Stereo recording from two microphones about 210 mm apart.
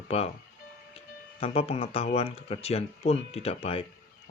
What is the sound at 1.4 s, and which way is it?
Speech, 30° left (ahead or behind).